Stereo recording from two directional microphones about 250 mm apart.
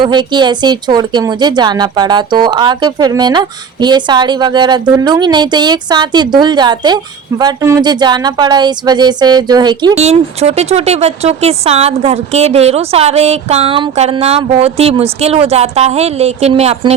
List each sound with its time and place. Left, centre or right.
0.0 s speech: centre